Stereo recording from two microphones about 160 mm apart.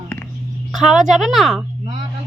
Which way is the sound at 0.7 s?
Centre (ahead or behind).